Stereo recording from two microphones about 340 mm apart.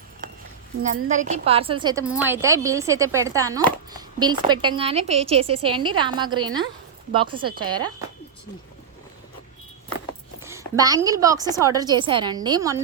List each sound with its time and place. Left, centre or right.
0.2 s a sound: right
0.8 s a woman's voice: right
10.8 s a woman's voice: centre